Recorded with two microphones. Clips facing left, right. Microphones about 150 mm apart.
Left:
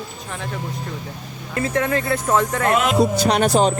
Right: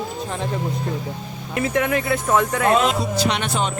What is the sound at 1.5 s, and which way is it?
Speech, 15° right (ahead or behind).